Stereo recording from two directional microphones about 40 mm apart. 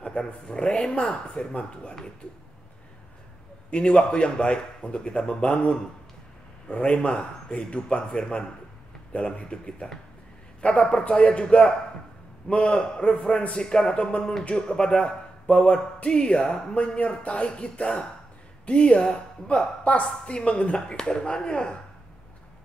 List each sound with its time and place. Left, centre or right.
0.0 s a sound: left
0.5 s a woman's voice: left
3.7 s a man's voice: left